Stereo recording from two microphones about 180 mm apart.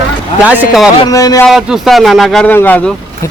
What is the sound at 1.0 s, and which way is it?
Speech, 20° left (ahead or behind).